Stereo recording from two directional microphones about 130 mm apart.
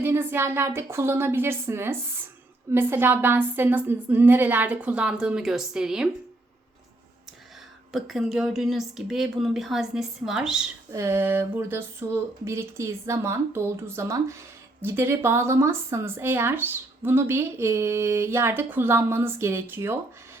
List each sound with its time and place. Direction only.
0.0 s a woman's voice: 15° right (ahead or behind)
7.9 s a woman's voice: centre (ahead or behind)
10.9 s a woman's voice: 20° right (ahead or behind)